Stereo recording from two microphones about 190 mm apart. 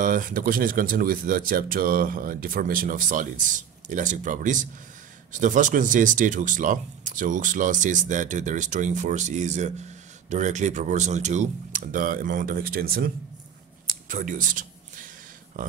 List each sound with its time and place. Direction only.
0.0 s speech: 45° right (ahead or behind)